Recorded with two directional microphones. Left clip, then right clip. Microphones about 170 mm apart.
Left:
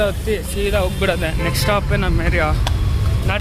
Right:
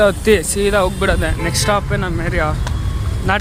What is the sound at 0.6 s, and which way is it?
Speech, 25° right (ahead or behind).